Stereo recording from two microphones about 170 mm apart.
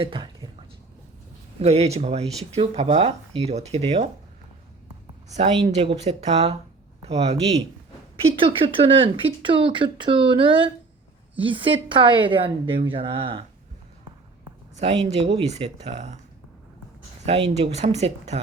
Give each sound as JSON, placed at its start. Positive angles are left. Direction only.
{"t": 0.0, "sound": "speech", "side_deg": -30}
{"t": 1.6, "sound": "speech", "side_deg": -40}
{"t": 5.3, "sound": "a man's voice", "side_deg": -40}
{"t": 14.8, "sound": "speech", "side_deg": -40}
{"t": 17.5, "sound": "speech", "side_deg": -40}